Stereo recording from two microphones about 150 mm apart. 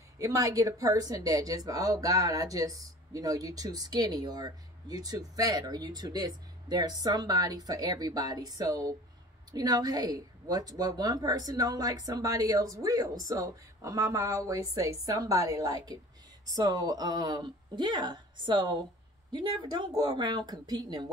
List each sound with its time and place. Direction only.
0.2 s speech: 20° right (ahead or behind)